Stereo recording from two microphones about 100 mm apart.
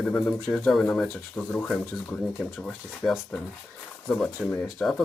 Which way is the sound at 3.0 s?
5° left (ahead or behind).